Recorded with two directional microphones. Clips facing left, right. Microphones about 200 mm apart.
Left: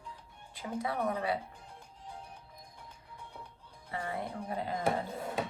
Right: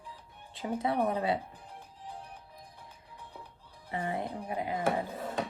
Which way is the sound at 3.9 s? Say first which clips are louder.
Right 3 dB; 20° right (ahead or behind).